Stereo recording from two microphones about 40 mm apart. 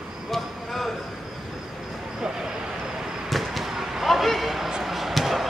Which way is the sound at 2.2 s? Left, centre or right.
Centre.